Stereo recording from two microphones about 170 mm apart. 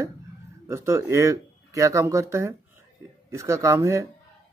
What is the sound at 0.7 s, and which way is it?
Speech, 15° right (ahead or behind).